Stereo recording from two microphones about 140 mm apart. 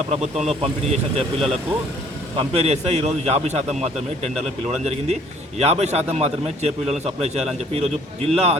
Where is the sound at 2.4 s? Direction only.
50° right (ahead or behind).